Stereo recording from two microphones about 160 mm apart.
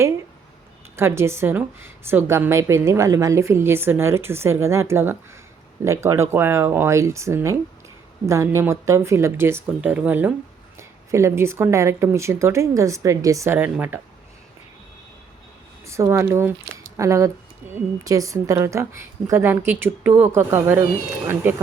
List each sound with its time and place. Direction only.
0.9 s a woman's voice: 15° right (ahead or behind)
15.9 s a woman's voice: 20° right (ahead or behind)